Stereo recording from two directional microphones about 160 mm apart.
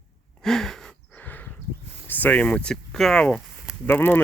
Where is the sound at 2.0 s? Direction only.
10° left (ahead or behind).